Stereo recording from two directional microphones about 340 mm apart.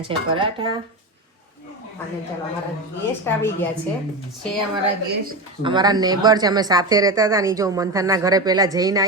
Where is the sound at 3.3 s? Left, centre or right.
Centre.